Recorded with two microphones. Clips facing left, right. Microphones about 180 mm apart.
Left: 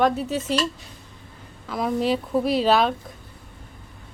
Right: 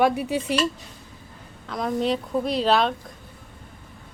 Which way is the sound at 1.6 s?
5° left (ahead or behind).